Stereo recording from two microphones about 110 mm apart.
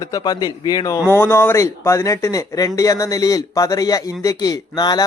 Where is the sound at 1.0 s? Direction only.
20° left (ahead or behind).